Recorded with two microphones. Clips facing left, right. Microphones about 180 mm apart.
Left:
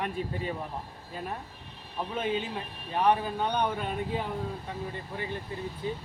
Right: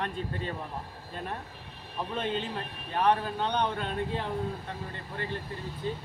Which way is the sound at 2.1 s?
5° left (ahead or behind).